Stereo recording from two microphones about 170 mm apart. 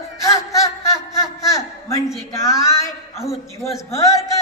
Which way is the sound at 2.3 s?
20° left (ahead or behind).